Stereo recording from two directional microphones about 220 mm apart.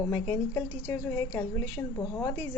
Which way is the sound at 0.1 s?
15° left (ahead or behind).